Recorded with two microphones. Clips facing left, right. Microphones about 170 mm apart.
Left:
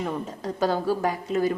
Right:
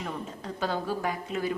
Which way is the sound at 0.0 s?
40° left (ahead or behind).